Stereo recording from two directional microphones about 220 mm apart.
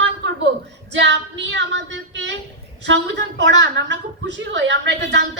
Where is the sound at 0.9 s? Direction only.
55° right (ahead or behind).